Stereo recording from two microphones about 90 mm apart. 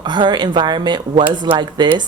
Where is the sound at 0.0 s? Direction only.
55° right (ahead or behind).